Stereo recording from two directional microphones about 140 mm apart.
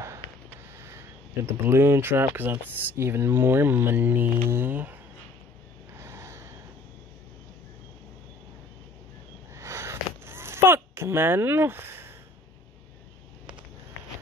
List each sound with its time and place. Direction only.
0.7 s speech: 20° right (ahead or behind)
5.9 s a sound: 20° right (ahead or behind)
9.5 s sniff: 20° right (ahead or behind)